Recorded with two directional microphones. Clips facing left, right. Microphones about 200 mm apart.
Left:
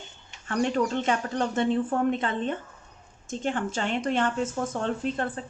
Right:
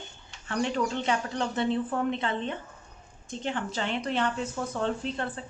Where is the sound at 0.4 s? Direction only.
45° left (ahead or behind).